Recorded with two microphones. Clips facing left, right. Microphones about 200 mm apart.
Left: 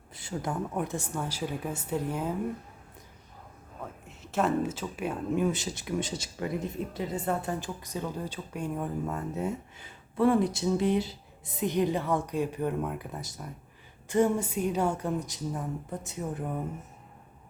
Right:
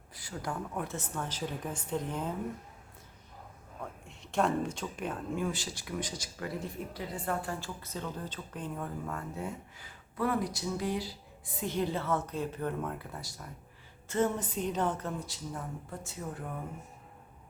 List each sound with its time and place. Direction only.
0.1 s a woman's voice: 25° left (ahead or behind); by 2.3 s 10° left (ahead or behind)
4.2 s speech: 5° left (ahead or behind)
5.3 s a woman's voice: 20° left (ahead or behind)